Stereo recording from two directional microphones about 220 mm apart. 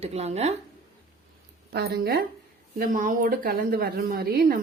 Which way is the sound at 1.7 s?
45° right (ahead or behind).